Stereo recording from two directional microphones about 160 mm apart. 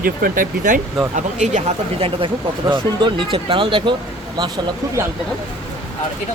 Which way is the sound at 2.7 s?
30° right (ahead or behind).